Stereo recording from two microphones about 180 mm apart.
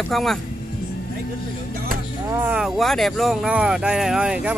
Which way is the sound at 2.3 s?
10° right (ahead or behind).